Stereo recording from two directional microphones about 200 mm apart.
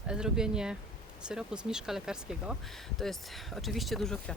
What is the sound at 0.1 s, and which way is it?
Speech, 5° right (ahead or behind).